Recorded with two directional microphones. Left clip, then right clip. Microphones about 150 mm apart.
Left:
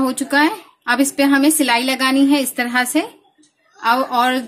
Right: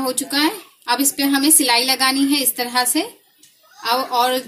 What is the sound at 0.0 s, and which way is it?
A woman's voice, 60° left (ahead or behind).